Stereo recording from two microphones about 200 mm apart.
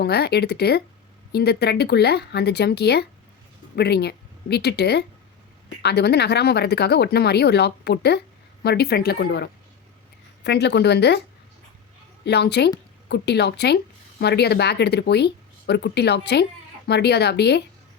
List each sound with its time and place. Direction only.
0.0 s a woman's voice: 55° left (ahead or behind)
12.2 s speech: 55° left (ahead or behind)